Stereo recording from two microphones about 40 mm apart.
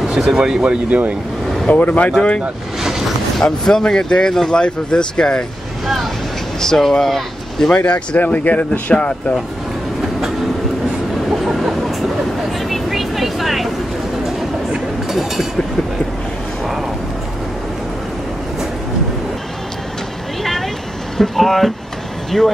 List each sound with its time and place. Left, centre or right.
0.0 s speech: centre
0.8 s speech: right
1.7 s speech: left
2.8 s a sound: centre
3.4 s speech: centre
6.6 s speech: centre
7.7 s speech: left
8.9 s speech: left
11.2 s chicken: centre
12.6 s vehicle: centre
15.0 s a sound: centre
21.2 s speech: centre